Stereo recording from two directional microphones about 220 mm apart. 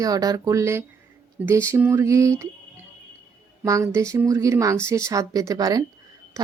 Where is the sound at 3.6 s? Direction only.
15° right (ahead or behind).